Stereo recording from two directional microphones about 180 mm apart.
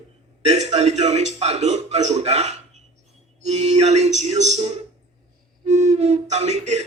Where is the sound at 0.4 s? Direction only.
40° right (ahead or behind).